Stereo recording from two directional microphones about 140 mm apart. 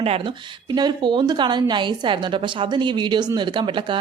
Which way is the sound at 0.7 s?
30° right (ahead or behind).